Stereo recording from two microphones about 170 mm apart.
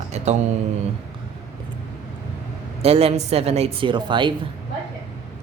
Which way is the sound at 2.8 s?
35° right (ahead or behind).